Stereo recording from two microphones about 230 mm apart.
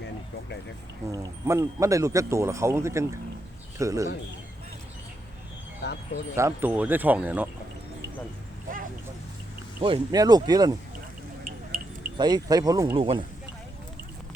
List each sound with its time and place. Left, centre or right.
1.1 s speech: centre
5.8 s speech: left
6.3 s speech: centre
9.8 s speech: centre
11.7 s cricket: right
12.1 s speech: centre